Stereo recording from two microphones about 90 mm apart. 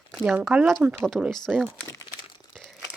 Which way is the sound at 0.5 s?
20° right (ahead or behind).